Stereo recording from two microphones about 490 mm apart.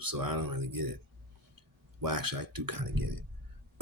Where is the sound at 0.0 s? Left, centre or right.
Right.